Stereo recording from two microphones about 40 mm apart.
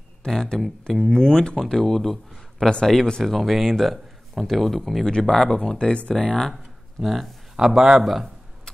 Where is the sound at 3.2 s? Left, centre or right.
Centre; by 6.1 s left.